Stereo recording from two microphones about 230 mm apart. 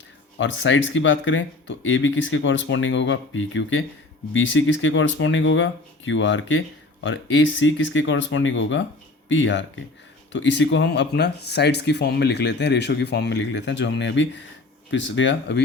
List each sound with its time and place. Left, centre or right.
0.3 s speech: left